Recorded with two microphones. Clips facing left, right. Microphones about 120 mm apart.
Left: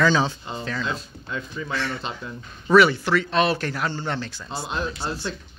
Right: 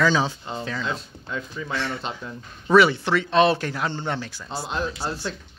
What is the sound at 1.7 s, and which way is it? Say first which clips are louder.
Speech: right 1 dB; 20° right (ahead or behind).